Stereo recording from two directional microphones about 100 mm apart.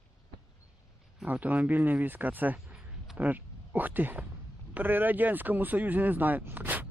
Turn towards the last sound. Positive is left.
turn(degrees=-20)  # may be behind; listen again after turning